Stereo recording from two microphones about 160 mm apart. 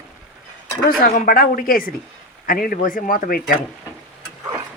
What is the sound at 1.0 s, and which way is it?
A woman's voice, 60° left (ahead or behind).